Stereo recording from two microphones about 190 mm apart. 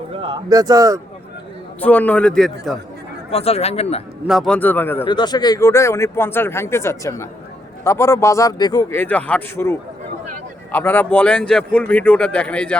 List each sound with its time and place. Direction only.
0.2 s a man's voice: 20° right (ahead or behind)
1.8 s speech: 10° left (ahead or behind)
3.3 s speech: 30° left (ahead or behind)
4.3 s speech: centre (ahead or behind)
5.0 s speech: 25° left (ahead or behind); by 12.7 s 5° left (ahead or behind)